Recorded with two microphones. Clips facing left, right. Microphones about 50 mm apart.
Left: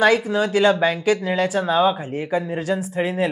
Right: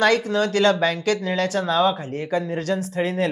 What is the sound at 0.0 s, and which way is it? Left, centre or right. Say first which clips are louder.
Speech: left 2 dB; centre.